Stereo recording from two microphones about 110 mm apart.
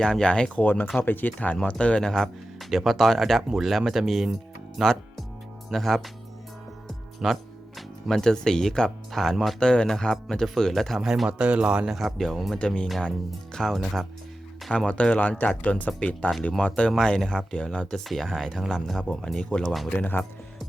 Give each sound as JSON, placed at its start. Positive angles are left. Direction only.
{"t": 0.0, "sound": "speech", "side_deg": 5}
{"t": 6.8, "sound": "music", "side_deg": 0}
{"t": 7.8, "sound": "speech", "side_deg": 0}
{"t": 11.9, "sound": "speech", "side_deg": 0}
{"t": 20.0, "sound": "speech", "side_deg": 15}